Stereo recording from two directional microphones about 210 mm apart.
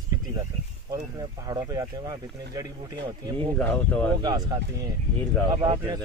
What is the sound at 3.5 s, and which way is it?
Speech, 5° left (ahead or behind).